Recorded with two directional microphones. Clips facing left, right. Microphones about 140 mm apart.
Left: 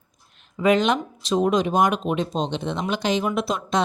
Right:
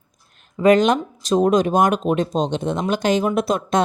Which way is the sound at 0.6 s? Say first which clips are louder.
Right 5 dB; 45° right (ahead or behind).